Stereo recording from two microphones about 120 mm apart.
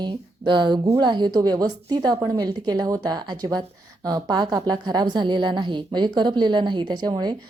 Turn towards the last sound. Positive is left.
turn(degrees=-35)  # may be behind; listen again after turning